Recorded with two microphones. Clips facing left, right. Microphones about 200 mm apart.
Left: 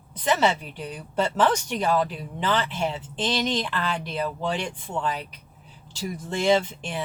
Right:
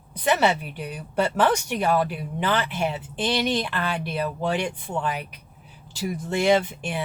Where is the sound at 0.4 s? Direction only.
25° left (ahead or behind).